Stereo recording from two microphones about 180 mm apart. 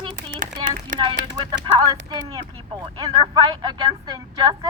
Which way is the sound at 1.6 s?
25° right (ahead or behind).